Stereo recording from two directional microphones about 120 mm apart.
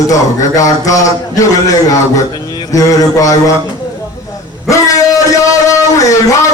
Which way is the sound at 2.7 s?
30° left (ahead or behind).